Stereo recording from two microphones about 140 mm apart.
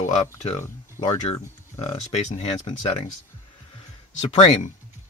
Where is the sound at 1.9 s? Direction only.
50° left (ahead or behind).